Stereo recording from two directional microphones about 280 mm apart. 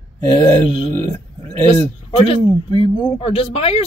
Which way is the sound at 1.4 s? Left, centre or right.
Centre.